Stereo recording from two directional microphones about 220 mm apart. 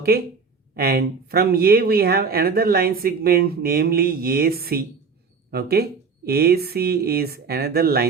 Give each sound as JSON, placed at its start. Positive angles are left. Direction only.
{"t": 0.1, "sound": "speech", "side_deg": -45}